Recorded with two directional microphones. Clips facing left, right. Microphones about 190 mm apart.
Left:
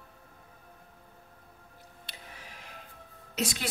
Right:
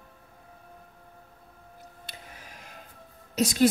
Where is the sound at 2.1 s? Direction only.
45° right (ahead or behind).